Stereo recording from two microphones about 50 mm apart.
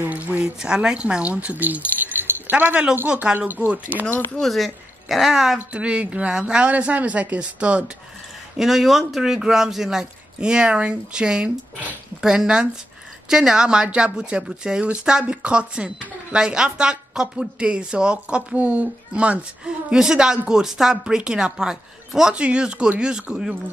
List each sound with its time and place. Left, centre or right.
0.1 s a sound: right
0.4 s speech: centre
3.3 s speech: right
3.6 s speech: right
4.4 s a woman's voice: centre
5.7 s speech: right
6.7 s speech: right
8.5 s a man's voice: centre